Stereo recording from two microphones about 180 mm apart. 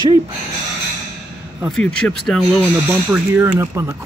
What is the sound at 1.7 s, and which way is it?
Speech, 5° left (ahead or behind).